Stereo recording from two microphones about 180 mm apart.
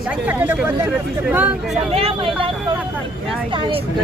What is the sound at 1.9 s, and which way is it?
Speech, 30° right (ahead or behind).